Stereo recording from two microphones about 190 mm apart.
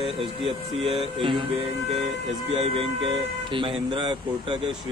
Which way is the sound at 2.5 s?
30° right (ahead or behind).